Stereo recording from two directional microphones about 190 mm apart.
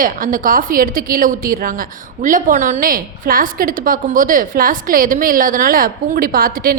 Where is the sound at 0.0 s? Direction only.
45° right (ahead or behind).